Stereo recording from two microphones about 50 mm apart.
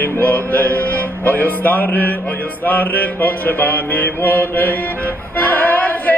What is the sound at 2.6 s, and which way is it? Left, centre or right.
Mantra, left.